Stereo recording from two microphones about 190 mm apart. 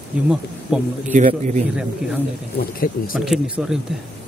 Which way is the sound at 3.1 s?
Centre (ahead or behind).